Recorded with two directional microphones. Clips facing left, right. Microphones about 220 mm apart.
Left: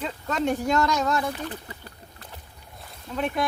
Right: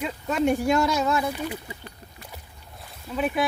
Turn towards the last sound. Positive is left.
turn(degrees=-5)  # may be behind; listen again after turning